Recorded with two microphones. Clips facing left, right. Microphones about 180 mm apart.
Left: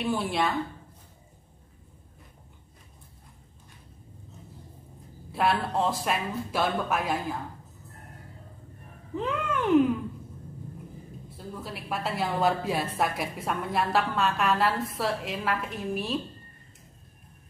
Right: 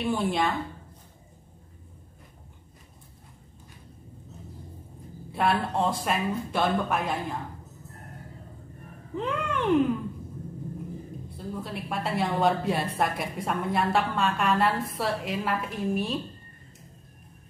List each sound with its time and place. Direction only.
0.0 s a woman's voice: centre (ahead or behind)
5.3 s a woman's voice: centre (ahead or behind)
9.1 s a woman's voice: centre (ahead or behind)
11.2 s a woman's voice: centre (ahead or behind)